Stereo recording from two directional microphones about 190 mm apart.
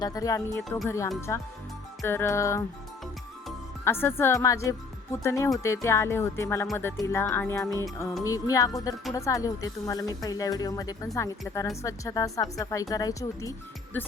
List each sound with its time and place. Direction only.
0.0 s speech: 20° left (ahead or behind)
3.8 s speech: 10° left (ahead or behind)